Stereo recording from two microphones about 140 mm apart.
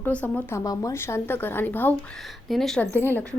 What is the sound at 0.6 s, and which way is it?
A woman's voice, 25° left (ahead or behind).